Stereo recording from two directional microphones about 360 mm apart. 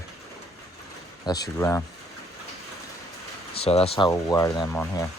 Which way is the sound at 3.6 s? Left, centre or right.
Centre.